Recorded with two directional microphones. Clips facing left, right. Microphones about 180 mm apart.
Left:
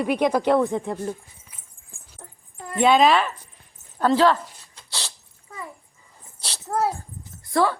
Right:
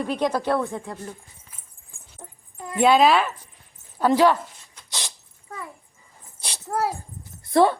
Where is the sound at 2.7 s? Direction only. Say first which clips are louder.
Even; 5° right (ahead or behind).